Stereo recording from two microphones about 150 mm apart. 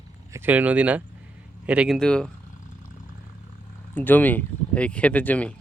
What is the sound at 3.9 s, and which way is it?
Speech, 10° left (ahead or behind).